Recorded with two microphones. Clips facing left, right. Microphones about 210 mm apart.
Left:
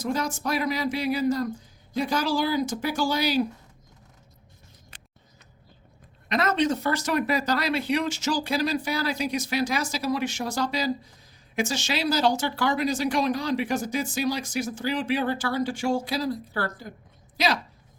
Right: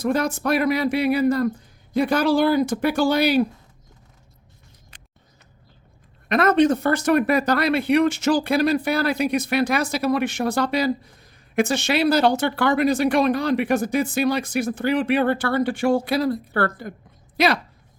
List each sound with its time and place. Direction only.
0.0 s speech: 60° right (ahead or behind)
6.2 s speech: 55° right (ahead or behind)